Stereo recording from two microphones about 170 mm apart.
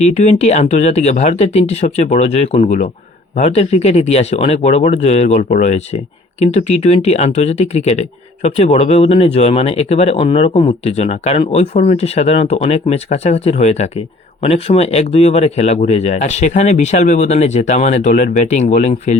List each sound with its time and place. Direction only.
0.0 s speech: 40° left (ahead or behind)